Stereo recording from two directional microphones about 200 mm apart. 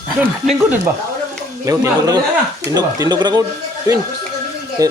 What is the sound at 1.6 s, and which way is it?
Speech, 15° right (ahead or behind).